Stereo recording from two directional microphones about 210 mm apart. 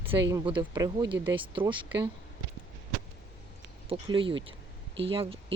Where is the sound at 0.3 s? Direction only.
20° right (ahead or behind).